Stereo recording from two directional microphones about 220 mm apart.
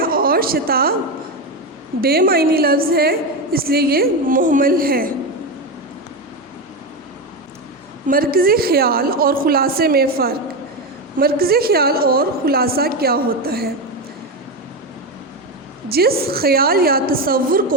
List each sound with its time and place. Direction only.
0.0 s a sound: 40° right (ahead or behind)
2.0 s a woman's voice: 45° right (ahead or behind)
8.0 s a woman's voice: 40° right (ahead or behind)
15.9 s a woman's voice: 45° right (ahead or behind)